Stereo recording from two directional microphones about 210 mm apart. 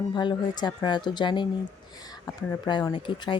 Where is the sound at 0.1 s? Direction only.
20° left (ahead or behind).